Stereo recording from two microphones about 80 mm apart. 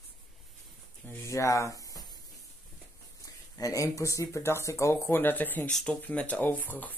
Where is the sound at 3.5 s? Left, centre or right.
Left.